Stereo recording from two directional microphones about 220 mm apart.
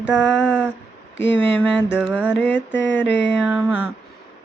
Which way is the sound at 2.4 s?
10° left (ahead or behind).